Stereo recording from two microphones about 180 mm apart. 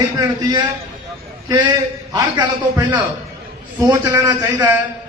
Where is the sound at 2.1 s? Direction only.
25° right (ahead or behind).